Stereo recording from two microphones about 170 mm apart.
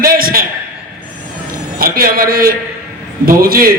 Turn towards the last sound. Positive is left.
turn(degrees=-60)  # may be behind; listen again after turning